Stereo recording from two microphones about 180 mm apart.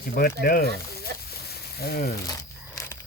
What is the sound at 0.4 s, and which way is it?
Speech, 60° left (ahead or behind).